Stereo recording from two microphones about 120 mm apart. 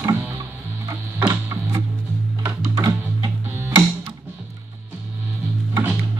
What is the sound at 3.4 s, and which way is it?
Music, 20° right (ahead or behind).